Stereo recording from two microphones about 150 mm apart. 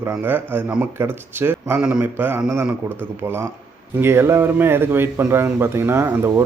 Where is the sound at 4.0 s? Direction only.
15° right (ahead or behind).